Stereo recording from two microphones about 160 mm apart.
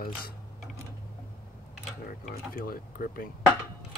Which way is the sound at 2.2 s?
65° left (ahead or behind).